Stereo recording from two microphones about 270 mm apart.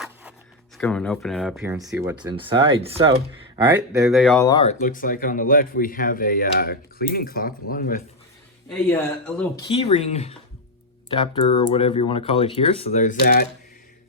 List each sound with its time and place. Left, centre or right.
0.0 s zipper: centre
0.8 s speech: centre
4.0 s speech: centre
4.4 s speech: centre
8.7 s speech: centre
9.6 s speech: left
11.5 s speech: left